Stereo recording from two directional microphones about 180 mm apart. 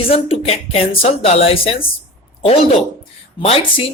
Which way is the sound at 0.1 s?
35° left (ahead or behind).